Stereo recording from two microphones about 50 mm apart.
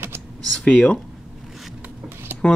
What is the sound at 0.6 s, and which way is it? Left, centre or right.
Speech, left.